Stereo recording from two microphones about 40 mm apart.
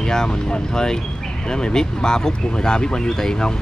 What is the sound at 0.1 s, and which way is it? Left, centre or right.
Speech, centre.